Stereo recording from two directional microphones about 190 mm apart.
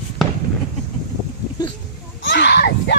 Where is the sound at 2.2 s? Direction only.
65° left (ahead or behind).